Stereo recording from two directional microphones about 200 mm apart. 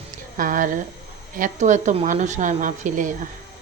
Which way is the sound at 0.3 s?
45° right (ahead or behind).